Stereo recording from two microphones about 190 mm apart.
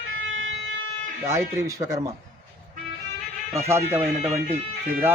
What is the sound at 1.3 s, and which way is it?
Speech, 15° right (ahead or behind).